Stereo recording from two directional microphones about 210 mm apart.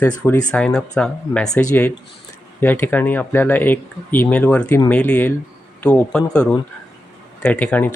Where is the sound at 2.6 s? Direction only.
10° left (ahead or behind).